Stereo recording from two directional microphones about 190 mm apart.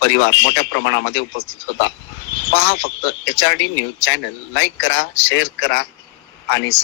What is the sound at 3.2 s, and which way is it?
A man's voice, 75° left (ahead or behind).